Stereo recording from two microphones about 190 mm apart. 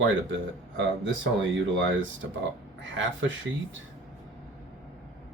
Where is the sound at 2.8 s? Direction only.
80° right.